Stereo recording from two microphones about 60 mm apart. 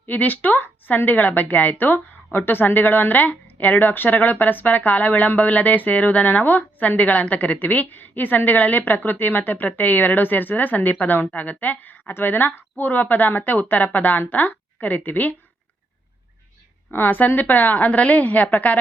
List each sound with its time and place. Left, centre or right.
0.0 s a woman's voice: left
16.9 s a woman's voice: left